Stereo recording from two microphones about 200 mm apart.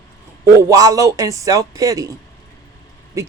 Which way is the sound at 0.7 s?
15° right (ahead or behind).